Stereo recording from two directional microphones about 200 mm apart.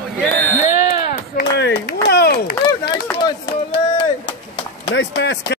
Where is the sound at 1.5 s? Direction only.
55° left (ahead or behind).